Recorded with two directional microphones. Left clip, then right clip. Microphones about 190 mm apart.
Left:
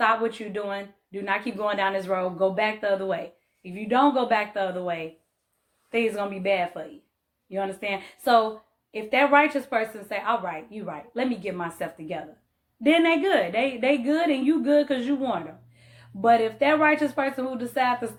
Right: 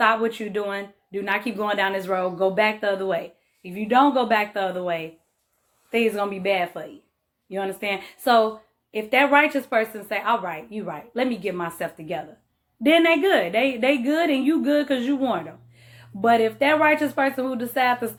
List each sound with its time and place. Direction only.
0.0 s a woman's voice: 45° right (ahead or behind)